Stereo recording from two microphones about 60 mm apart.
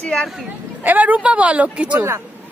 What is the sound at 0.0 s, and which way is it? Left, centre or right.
Speech, centre.